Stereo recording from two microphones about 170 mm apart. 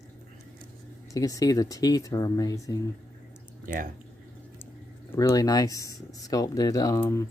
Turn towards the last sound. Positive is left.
turn(degrees=20)  # may be behind; listen again after turning